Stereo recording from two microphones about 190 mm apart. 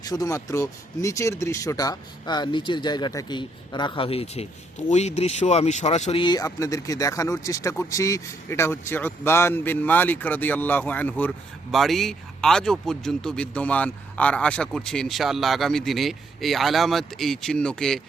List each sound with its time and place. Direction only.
0.0 s speech: 20° left (ahead or behind); by 18.0 s 5° left (ahead or behind)